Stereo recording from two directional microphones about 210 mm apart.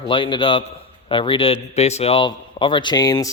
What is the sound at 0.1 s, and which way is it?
Speech, 25° left (ahead or behind).